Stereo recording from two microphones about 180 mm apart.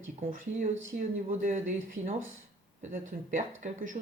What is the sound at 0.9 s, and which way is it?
Speech, 45° right (ahead or behind).